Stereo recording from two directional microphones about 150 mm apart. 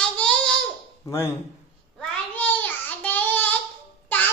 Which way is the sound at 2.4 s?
10° left (ahead or behind).